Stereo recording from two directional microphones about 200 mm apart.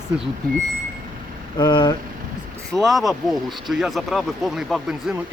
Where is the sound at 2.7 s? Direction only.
Centre (ahead or behind).